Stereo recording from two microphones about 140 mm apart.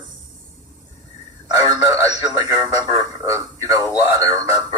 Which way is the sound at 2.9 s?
20° right (ahead or behind).